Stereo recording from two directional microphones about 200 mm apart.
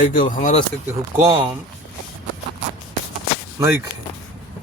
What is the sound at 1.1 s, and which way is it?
Speech, 15° right (ahead or behind).